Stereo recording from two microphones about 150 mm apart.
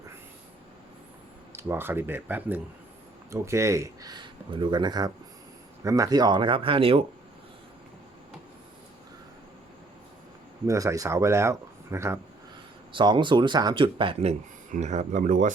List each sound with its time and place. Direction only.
1.5 s speech: 15° right (ahead or behind); by 7.0 s 40° right (ahead or behind)
10.7 s speech: 20° right (ahead or behind)
12.9 s speech: 30° right (ahead or behind)
14.7 s speech: 50° right (ahead or behind)